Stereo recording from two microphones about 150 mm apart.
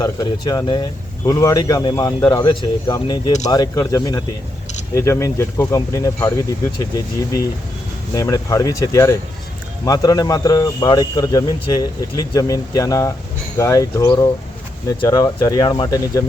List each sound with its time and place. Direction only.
0.0 s speech: 25° left (ahead or behind)
8.1 s speech: 20° left (ahead or behind)